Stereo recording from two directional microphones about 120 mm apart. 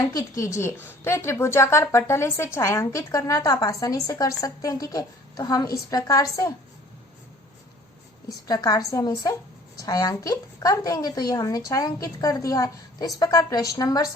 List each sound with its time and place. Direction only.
0.1 s a woman's voice: 30° left (ahead or behind)
8.4 s a woman's voice: 30° left (ahead or behind)